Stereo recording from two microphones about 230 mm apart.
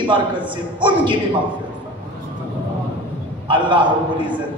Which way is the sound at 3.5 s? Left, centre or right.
Right.